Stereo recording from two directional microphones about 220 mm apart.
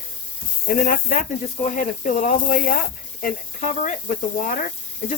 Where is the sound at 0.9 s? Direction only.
40° left (ahead or behind).